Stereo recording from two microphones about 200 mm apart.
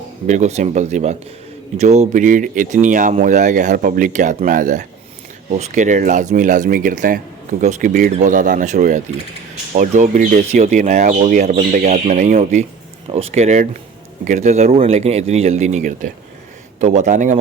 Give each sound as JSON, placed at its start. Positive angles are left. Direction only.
{"t": 0.3, "sound": "speech", "side_deg": -35}